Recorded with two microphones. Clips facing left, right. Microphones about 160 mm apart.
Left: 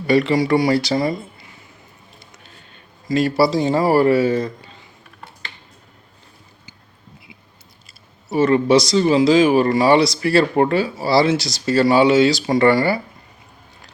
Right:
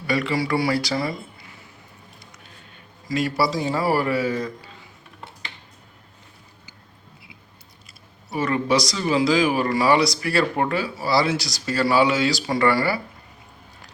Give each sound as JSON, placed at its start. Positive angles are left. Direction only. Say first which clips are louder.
{"t": 0.1, "sound": "speech", "louder": "left 7 dB", "side_deg": 25}
{"t": 3.1, "sound": "speech", "louder": "left 6 dB", "side_deg": 30}
{"t": 8.3, "sound": "speech", "louder": "left 7 dB", "side_deg": 25}